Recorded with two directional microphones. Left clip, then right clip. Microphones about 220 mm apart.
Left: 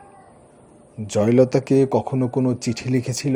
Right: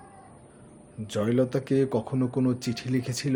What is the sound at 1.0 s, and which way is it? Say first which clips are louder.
A man's voice: left 9 dB; 25° left (ahead or behind).